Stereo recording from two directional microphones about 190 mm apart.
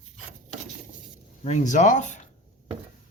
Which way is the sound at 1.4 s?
40° left (ahead or behind).